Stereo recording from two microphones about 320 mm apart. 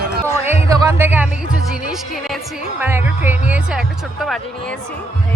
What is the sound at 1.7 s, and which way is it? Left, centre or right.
Speech, centre.